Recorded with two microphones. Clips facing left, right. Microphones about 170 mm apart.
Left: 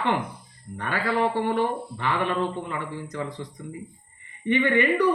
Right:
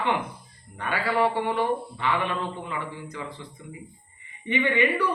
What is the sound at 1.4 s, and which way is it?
Speech, 45° left (ahead or behind).